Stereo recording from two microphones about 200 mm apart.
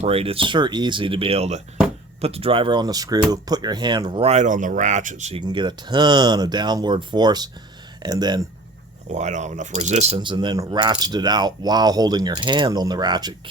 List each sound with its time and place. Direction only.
0.0 s speech: 30° right (ahead or behind)
5.4 s speech: 20° right (ahead or behind)
9.1 s speech: 35° right (ahead or behind); by 13.3 s 20° right (ahead or behind)